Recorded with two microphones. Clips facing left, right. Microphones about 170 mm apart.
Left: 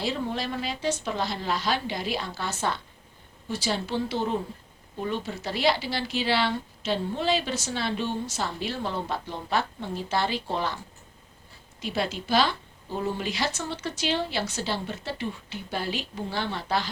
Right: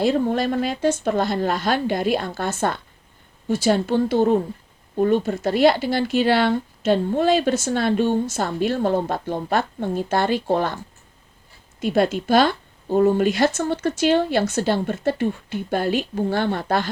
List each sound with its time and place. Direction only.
0.0 s speech: 50° right (ahead or behind)
11.8 s speech: 50° right (ahead or behind)